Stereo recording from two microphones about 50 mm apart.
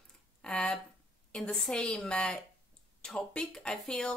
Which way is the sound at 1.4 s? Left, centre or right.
Centre.